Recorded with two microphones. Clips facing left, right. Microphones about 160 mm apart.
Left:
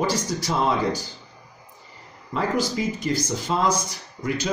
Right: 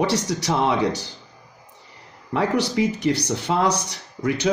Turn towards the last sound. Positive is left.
turn(degrees=-70)  # may be behind; listen again after turning